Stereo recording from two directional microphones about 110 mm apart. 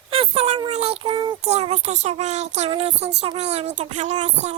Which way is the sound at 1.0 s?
45° right (ahead or behind).